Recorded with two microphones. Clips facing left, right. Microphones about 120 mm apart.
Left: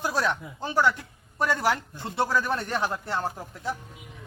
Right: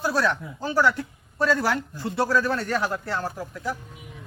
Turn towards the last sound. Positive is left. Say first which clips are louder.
# right 2 dB
turn(degrees=25)  # may be behind; listen again after turning